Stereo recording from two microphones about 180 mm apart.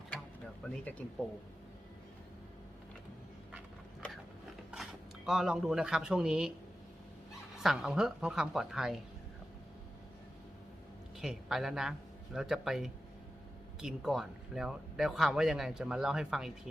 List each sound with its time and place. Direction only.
0.6 s speech: 10° left (ahead or behind)
4.7 s speech: centre (ahead or behind)
7.5 s speech: centre (ahead or behind)
11.2 s a man's voice: 5° right (ahead or behind)